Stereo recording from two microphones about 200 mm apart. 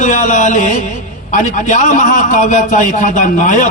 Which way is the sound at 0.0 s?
40° left (ahead or behind).